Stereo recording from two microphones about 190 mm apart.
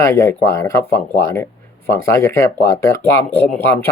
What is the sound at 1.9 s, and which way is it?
Speech, 15° left (ahead or behind).